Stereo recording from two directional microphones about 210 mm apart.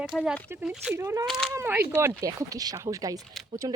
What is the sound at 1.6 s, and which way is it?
Speech, 10° right (ahead or behind).